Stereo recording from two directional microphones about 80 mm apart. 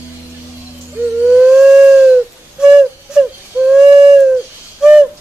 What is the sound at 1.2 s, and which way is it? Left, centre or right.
Whistle, centre.